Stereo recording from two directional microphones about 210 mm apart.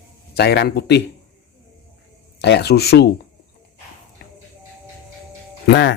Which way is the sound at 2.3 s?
55° left (ahead or behind).